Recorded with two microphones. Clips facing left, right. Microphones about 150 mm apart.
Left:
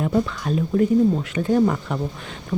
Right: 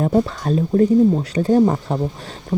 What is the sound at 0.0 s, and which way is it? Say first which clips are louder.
Speech: right 4 dB; 40° right (ahead or behind).